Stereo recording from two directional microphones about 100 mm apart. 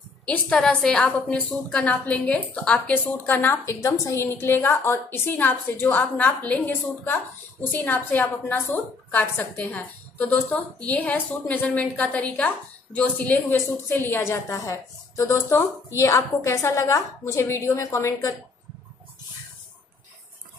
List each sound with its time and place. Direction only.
0.2 s a woman's voice: 10° left (ahead or behind); by 18.3 s 30° left (ahead or behind)